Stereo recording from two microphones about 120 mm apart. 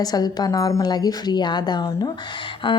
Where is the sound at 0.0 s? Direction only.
35° left (ahead or behind).